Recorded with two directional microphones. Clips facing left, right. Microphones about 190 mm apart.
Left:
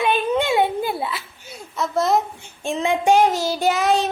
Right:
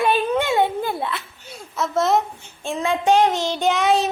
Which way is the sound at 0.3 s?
15° left (ahead or behind).